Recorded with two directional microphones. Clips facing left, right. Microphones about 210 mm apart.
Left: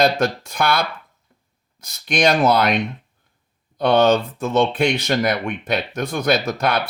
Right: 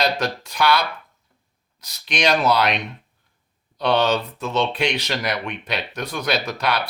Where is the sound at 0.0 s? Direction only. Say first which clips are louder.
Left 5 dB; 50° left (ahead or behind).